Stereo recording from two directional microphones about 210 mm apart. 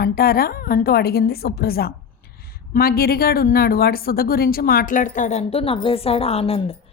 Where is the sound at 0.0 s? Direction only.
45° left (ahead or behind).